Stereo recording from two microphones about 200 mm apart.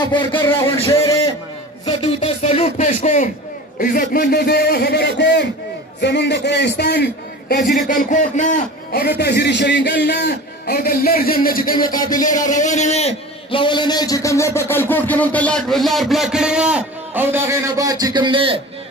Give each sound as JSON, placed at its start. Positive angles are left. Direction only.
{"t": 0.0, "sound": "a man's voice", "side_deg": 25}
{"t": 1.9, "sound": "a sound", "side_deg": 25}
{"t": 3.8, "sound": "a man's voice", "side_deg": 45}
{"t": 9.2, "sound": "a man's voice", "side_deg": 55}